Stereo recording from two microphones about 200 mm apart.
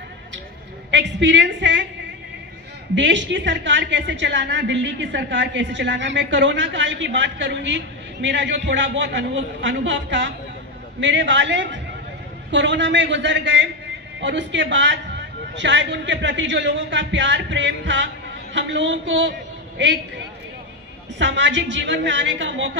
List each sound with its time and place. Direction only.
0.9 s a woman's voice: 60° right (ahead or behind)
2.9 s a woman's voice: 65° right (ahead or behind)
21.2 s a woman's voice: 65° right (ahead or behind)